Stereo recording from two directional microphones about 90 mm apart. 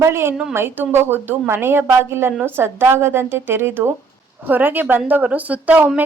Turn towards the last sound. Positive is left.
turn(degrees=-20)  # may be behind; listen again after turning